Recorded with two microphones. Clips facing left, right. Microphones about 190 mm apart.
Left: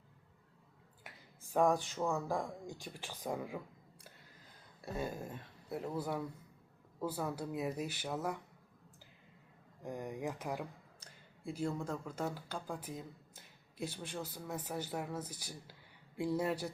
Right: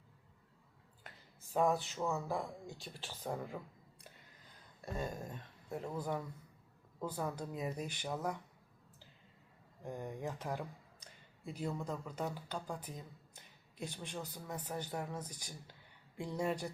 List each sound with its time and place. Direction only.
1.7 s speech: 15° left (ahead or behind)
4.9 s speech: 5° left (ahead or behind)
9.8 s speech: 10° left (ahead or behind)